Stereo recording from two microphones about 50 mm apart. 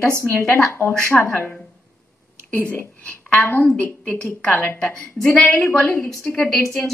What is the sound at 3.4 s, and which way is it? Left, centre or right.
Speech, left.